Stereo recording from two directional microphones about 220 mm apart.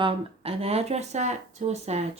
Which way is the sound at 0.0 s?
25° right (ahead or behind).